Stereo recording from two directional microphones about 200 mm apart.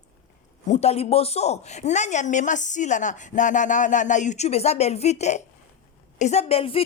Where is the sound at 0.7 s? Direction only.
30° left (ahead or behind).